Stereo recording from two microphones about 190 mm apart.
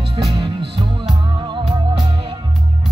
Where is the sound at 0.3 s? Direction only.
30° right (ahead or behind).